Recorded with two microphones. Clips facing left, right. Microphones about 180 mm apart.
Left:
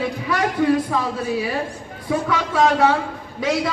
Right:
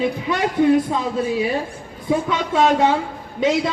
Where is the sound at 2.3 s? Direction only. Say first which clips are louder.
Left 1 dB; 25° right (ahead or behind).